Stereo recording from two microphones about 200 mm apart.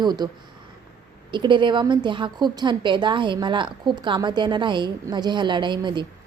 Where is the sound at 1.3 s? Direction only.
25° right (ahead or behind).